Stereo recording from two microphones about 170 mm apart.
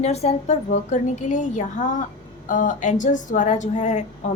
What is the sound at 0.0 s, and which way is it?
A woman's voice, 40° left (ahead or behind).